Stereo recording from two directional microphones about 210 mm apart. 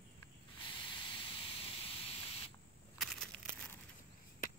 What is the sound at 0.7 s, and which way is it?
Hiss, 25° left (ahead or behind).